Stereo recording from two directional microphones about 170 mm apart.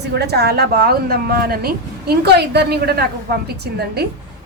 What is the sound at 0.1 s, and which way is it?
A woman's voice, 75° right (ahead or behind).